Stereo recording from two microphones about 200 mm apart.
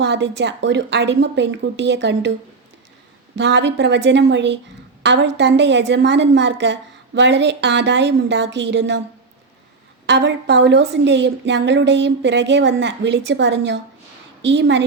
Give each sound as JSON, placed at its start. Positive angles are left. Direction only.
{"t": 0.0, "sound": "a woman's voice", "side_deg": -60}
{"t": 3.3, "sound": "a woman's voice", "side_deg": -60}
{"t": 10.1, "sound": "a woman's voice", "side_deg": -60}